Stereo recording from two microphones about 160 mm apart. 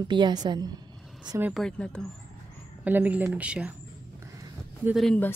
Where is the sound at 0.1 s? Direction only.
25° right (ahead or behind).